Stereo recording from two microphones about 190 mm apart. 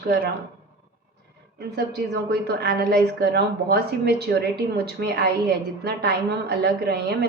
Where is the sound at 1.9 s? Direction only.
60° right (ahead or behind).